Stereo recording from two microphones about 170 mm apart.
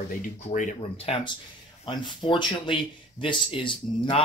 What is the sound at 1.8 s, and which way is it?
Speech, 30° left (ahead or behind).